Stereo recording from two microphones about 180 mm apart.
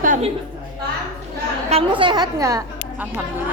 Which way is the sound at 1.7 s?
30° right (ahead or behind).